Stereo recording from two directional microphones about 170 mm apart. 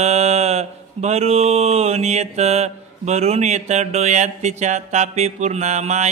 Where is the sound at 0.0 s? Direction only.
40° right (ahead or behind).